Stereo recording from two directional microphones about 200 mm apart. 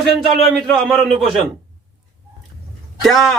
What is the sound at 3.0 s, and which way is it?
Speech, centre (ahead or behind).